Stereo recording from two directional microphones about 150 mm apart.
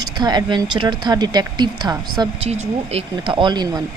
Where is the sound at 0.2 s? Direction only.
30° right (ahead or behind).